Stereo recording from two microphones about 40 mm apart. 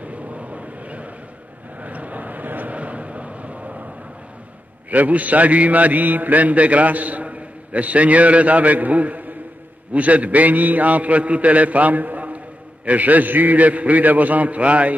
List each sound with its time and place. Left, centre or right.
0.0 s vehicle: right
4.9 s a man's voice: right